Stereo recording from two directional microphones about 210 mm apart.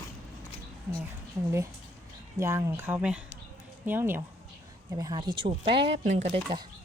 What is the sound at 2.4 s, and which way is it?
Speech, 15° right (ahead or behind).